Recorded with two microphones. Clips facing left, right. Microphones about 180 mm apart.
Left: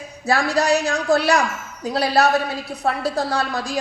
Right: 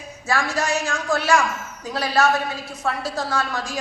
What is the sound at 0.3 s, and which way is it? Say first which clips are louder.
A woman's voice: left 5 dB; 35° left (ahead or behind).